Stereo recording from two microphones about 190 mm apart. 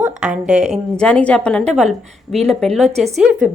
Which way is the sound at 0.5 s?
35° right (ahead or behind).